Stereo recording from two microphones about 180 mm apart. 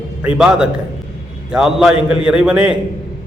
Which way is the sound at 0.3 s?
5° right (ahead or behind).